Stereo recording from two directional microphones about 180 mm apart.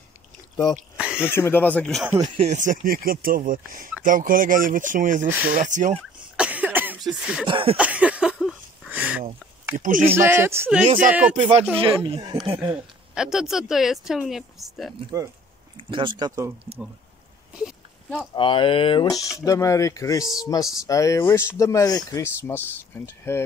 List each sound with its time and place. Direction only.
0.9 s a sound: 5° right (ahead or behind)
1.3 s speech: 10° left (ahead or behind)
2.1 s speech: 35° right (ahead or behind)
6.3 s cough: 5° right (ahead or behind)
7.4 s speech: 30° right (ahead or behind)
7.7 s a sound: 5° right (ahead or behind)
9.8 s speech: 50° right (ahead or behind)
10.0 s speech: 15° right (ahead or behind)
11.8 s speech: 30° right (ahead or behind)
13.1 s speech: 5° right (ahead or behind)
15.9 s speech: 25° right (ahead or behind)
18.3 s speech: 30° left (ahead or behind); by 23.4 s 15° left (ahead or behind)